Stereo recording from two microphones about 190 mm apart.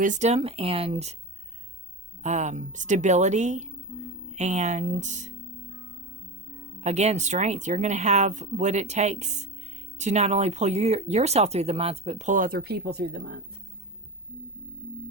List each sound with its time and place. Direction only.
0.0 s speech: 40° right (ahead or behind)
2.2 s speech: 40° right (ahead or behind)
6.8 s speech: 35° right (ahead or behind); by 13.3 s 60° right (ahead or behind)